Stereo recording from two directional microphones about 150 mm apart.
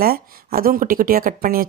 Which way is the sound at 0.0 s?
80° right.